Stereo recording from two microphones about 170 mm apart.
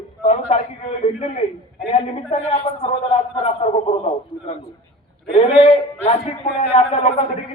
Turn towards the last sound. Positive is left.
turn(degrees=35)  # may be behind; listen again after turning